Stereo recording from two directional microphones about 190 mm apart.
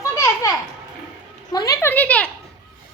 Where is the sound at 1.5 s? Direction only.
20° left (ahead or behind).